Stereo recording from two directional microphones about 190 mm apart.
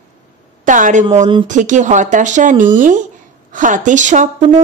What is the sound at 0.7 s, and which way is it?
A woman's voice, 40° right (ahead or behind).